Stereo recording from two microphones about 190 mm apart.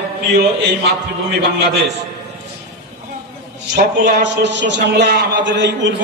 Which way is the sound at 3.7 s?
70° right (ahead or behind).